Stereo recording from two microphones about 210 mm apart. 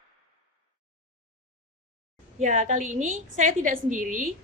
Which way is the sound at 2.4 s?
35° right (ahead or behind).